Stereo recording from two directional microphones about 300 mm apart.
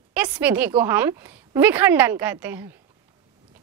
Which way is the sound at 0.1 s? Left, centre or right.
Centre.